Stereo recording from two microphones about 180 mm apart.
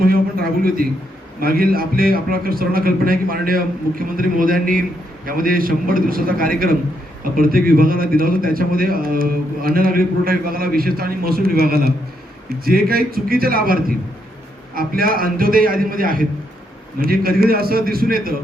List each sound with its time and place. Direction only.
0.0 s a sound: 55° right (ahead or behind)
1.4 s a man's voice: 55° right (ahead or behind)
14.8 s a man's voice: 55° right (ahead or behind)